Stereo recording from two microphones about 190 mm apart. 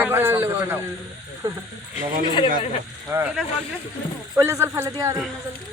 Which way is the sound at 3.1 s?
10° right (ahead or behind).